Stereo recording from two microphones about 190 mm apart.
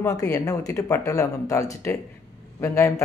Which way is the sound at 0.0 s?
15° left (ahead or behind).